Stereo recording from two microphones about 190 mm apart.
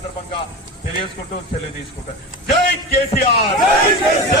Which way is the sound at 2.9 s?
55° left (ahead or behind).